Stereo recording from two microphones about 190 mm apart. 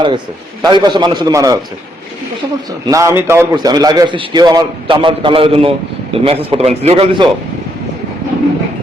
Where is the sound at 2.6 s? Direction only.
15° right (ahead or behind); by 7.2 s 30° right (ahead or behind).